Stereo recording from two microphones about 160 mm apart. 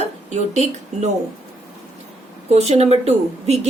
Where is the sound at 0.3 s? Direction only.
45° right (ahead or behind).